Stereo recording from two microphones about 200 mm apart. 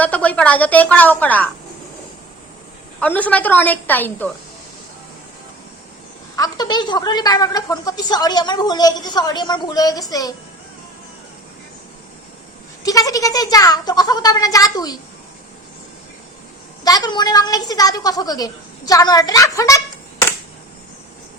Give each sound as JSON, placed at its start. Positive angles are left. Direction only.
{"t": 0.0, "sound": "a woman's voice", "side_deg": 5}
{"t": 3.0, "sound": "a woman's voice", "side_deg": 10}
{"t": 6.3, "sound": "a woman's voice", "side_deg": 20}
{"t": 12.8, "sound": "a woman's voice", "side_deg": 15}
{"t": 16.8, "sound": "a woman's voice", "side_deg": 20}